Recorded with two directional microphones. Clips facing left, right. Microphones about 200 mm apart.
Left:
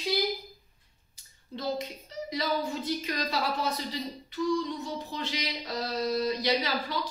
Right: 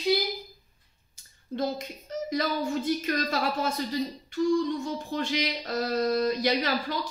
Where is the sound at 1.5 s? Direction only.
45° right (ahead or behind).